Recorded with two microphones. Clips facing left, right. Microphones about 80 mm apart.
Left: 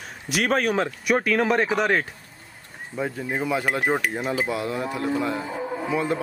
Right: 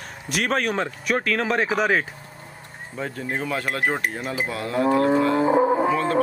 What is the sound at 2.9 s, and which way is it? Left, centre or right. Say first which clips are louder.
Cutlery: left 1 dB; centre.